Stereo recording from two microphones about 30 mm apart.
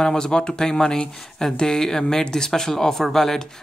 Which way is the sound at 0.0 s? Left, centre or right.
Left.